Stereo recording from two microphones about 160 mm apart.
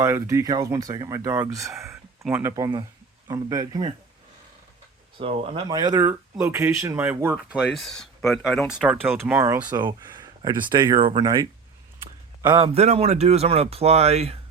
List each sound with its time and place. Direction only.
0.0 s speech: 15° right (ahead or behind)
1.9 s a sound: centre (ahead or behind)
2.4 s speech: 20° right (ahead or behind)
5.1 s speech: 35° right (ahead or behind); by 7.3 s 10° right (ahead or behind)
7.3 s speech: centre (ahead or behind)
9.6 s speech: 30° right (ahead or behind)